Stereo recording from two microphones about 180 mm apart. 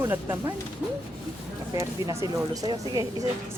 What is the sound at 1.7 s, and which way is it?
Speech, 20° right (ahead or behind).